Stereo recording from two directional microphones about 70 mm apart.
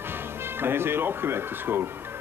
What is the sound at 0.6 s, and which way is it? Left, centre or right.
Speech, right.